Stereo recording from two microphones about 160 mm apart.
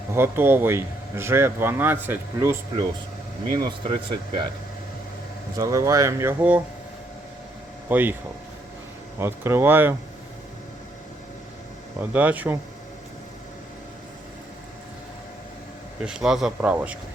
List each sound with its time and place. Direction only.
0.1 s speech: 15° right (ahead or behind)
3.5 s speech: 25° right (ahead or behind)
5.5 s speech: 20° right (ahead or behind)
7.9 s speech: 10° right (ahead or behind)
9.1 s speech: 15° right (ahead or behind)
11.9 s speech: 10° right (ahead or behind)
16.0 s speech: 5° right (ahead or behind)